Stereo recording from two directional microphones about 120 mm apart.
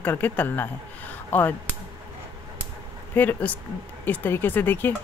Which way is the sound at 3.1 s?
15° left (ahead or behind).